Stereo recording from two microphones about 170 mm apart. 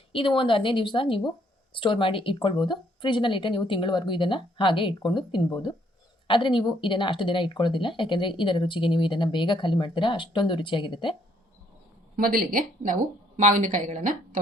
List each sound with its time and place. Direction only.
0.1 s a woman's voice: 30° left (ahead or behind)
12.1 s a woman's voice: 60° right (ahead or behind)